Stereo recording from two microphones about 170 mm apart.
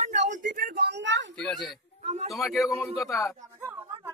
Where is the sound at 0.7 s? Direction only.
90° right.